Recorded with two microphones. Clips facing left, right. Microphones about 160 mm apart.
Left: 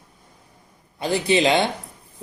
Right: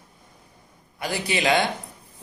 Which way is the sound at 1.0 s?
25° left (ahead or behind).